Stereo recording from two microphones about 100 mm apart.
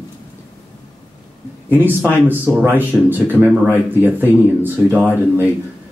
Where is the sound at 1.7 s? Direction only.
20° right (ahead or behind).